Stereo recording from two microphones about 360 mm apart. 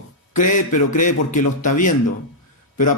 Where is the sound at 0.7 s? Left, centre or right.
Left.